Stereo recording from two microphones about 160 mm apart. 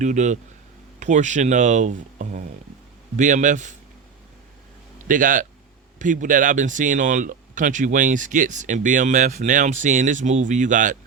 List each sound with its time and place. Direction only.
0.0 s speech: 50° right (ahead or behind)
5.0 s speech: 55° right (ahead or behind)